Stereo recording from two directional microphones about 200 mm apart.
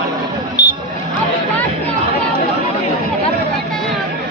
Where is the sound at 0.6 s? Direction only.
25° left (ahead or behind).